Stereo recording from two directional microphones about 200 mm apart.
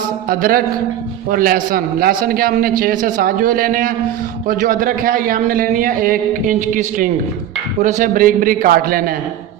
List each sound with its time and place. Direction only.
0.3 s a man's voice: 45° right (ahead or behind)